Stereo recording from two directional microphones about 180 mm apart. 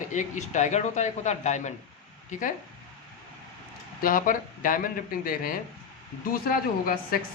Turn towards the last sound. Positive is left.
turn(degrees=55)  # may be behind; listen again after turning